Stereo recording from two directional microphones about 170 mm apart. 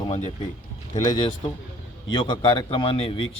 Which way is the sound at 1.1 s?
25° left (ahead or behind).